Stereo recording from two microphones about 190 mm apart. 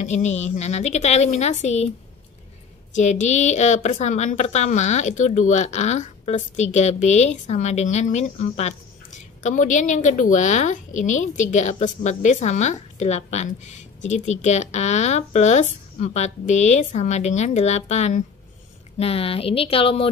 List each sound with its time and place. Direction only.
0.0 s a woman's voice: 35° left (ahead or behind)
2.9 s a woman's voice: 40° left (ahead or behind)